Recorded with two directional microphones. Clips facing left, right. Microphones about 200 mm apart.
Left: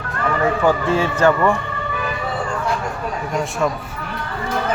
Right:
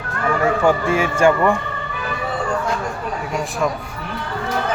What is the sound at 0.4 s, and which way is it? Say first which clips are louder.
A man's voice: even; 10° right (ahead or behind).